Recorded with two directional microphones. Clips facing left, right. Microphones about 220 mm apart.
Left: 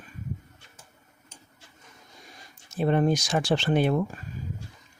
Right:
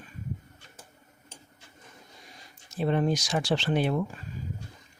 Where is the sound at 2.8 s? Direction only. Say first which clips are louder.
Left 3 dB; 50° left (ahead or behind).